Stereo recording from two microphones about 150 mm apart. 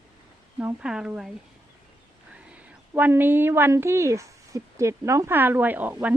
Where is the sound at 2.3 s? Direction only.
10° right (ahead or behind).